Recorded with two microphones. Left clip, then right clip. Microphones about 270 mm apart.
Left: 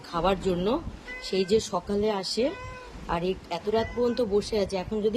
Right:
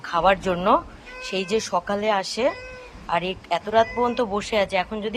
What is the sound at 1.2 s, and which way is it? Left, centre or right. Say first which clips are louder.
Speech: even; right.